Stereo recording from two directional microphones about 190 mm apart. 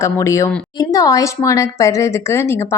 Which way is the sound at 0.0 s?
15° left (ahead or behind).